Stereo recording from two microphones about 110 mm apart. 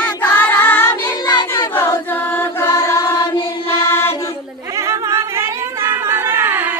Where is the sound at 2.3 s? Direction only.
20° left (ahead or behind).